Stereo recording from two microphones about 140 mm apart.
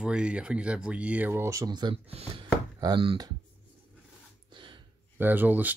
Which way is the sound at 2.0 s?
45° right (ahead or behind).